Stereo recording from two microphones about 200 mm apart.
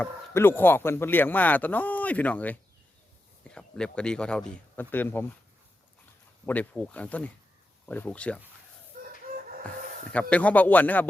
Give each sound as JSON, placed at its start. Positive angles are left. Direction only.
{"t": 0.0, "sound": "speech", "side_deg": 10}
{"t": 6.4, "sound": "speech", "side_deg": 10}
{"t": 8.9, "sound": "chicken", "side_deg": -45}
{"t": 10.1, "sound": "speech", "side_deg": 5}